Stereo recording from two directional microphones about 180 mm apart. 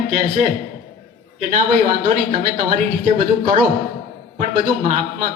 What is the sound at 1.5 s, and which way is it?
Speech, 45° right (ahead or behind).